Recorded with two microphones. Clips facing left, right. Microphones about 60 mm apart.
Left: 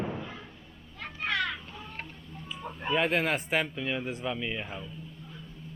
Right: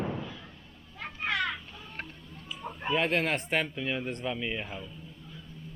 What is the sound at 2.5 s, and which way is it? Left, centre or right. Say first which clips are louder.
Speech: even; centre.